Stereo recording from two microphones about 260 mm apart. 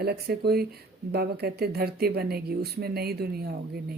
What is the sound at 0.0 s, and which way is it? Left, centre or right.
Speech, right.